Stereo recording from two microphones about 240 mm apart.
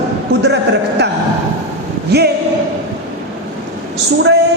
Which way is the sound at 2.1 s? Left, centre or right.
Right.